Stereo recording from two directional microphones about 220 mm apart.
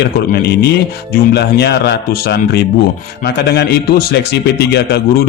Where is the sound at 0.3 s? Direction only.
45° left (ahead or behind).